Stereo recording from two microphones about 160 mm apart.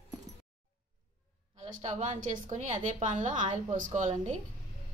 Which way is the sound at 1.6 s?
45° right (ahead or behind).